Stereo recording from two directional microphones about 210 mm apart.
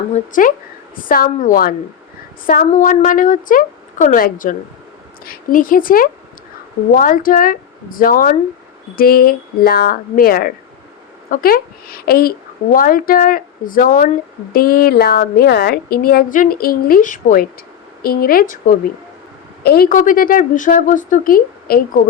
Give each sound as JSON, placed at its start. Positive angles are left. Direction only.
{"t": 0.1, "sound": "a woman's voice", "side_deg": 40}
{"t": 19.6, "sound": "a woman's voice", "side_deg": 45}